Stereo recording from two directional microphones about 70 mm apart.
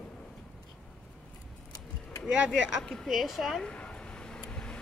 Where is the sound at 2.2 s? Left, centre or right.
Centre.